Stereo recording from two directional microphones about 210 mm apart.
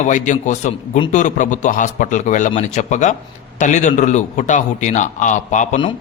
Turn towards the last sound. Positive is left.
turn(degrees=35)  # may be behind; listen again after turning